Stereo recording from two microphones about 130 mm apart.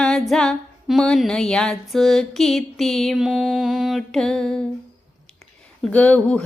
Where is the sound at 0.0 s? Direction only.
5° left (ahead or behind).